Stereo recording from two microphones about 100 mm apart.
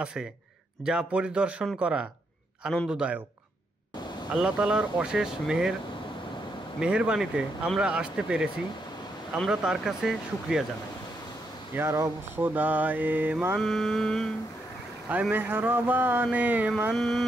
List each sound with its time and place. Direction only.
0.0 s mantra: 10° right (ahead or behind)
4.3 s mantra: 5° right (ahead or behind)
6.8 s mantra: 10° right (ahead or behind)
9.5 s mantra: 5° right (ahead or behind)
11.7 s mantra: 25° right (ahead or behind)
13.6 s mantra: centre (ahead or behind)
15.0 s mantra: 15° right (ahead or behind)
16.9 s mantra: 5° left (ahead or behind)